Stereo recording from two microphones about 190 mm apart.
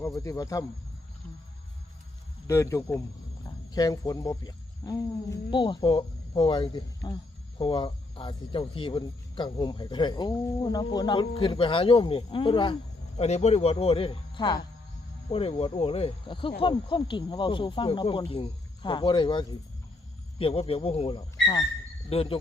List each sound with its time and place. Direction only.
0.0 s a man's voice: 15° left (ahead or behind)
2.5 s a man's voice: 15° left (ahead or behind)
13.1 s a man's voice: 35° left (ahead or behind)